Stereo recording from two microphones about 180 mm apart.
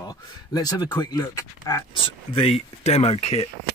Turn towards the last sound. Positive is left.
turn(degrees=35)  # may be behind; listen again after turning